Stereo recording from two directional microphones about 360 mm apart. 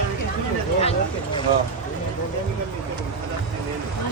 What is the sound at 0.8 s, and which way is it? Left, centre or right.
Speech, centre.